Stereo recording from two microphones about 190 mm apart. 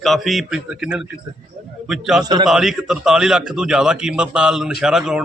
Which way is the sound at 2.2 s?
20° right (ahead or behind).